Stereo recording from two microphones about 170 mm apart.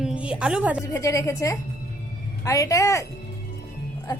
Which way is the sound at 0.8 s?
15° left (ahead or behind).